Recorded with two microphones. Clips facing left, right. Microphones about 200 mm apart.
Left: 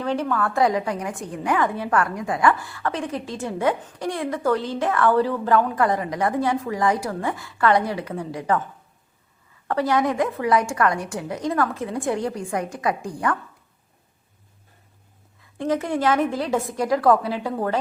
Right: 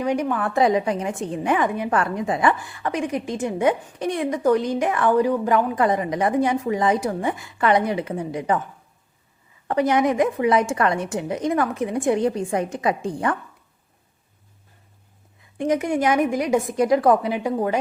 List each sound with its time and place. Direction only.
0.0 s a woman's voice: 15° right (ahead or behind)
9.6 s a woman's voice: 20° right (ahead or behind)
15.5 s a woman's voice: 15° right (ahead or behind)